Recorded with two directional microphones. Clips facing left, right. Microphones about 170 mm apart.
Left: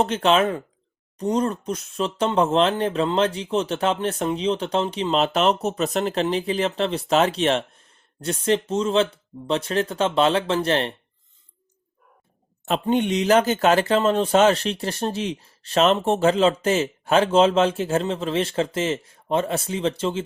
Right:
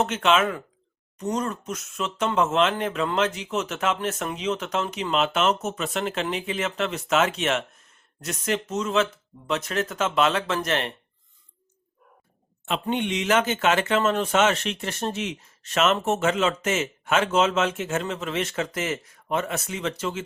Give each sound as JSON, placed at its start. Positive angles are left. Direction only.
{"t": 0.0, "sound": "speech", "side_deg": 35}
{"t": 12.9, "sound": "speech", "side_deg": 40}